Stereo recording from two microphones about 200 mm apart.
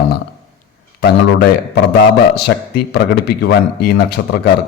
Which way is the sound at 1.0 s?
50° left (ahead or behind).